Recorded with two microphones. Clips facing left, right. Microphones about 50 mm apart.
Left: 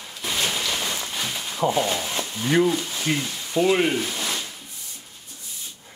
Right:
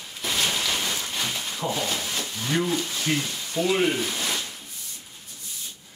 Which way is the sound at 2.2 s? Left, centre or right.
Centre.